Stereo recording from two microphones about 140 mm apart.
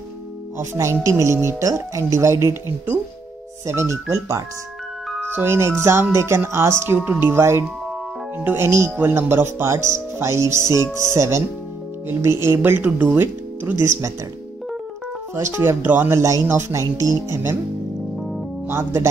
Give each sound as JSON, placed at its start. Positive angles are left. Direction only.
{"t": 0.6, "sound": "speech", "side_deg": -20}
{"t": 15.5, "sound": "speech", "side_deg": -20}
{"t": 18.7, "sound": "speech", "side_deg": -20}